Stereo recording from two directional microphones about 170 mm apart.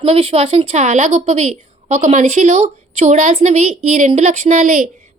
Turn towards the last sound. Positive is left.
turn(degrees=-45)  # may be behind; listen again after turning